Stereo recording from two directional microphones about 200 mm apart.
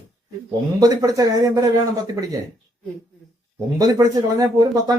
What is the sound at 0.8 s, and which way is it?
Speech, 20° right (ahead or behind).